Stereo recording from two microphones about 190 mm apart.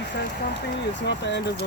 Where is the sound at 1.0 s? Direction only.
65° left (ahead or behind).